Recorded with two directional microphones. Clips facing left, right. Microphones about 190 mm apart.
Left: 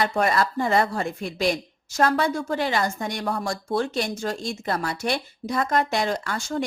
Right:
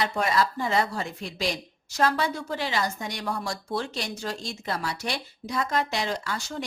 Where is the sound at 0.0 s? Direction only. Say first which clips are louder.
Left 3 dB; 55° left (ahead or behind).